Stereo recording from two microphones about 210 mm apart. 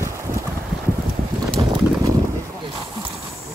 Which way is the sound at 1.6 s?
20° right (ahead or behind).